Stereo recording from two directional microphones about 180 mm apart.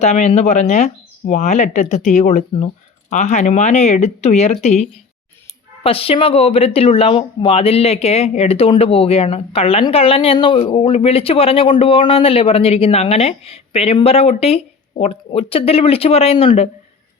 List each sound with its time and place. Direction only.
0.0 s speech: 40° left (ahead or behind)